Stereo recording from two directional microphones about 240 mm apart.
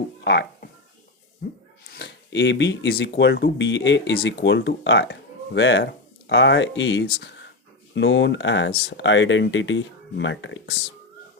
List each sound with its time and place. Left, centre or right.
0.3 s speech: left
1.9 s speech: left